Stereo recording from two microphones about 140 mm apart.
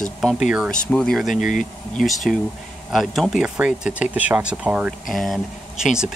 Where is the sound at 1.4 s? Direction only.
65° left (ahead or behind).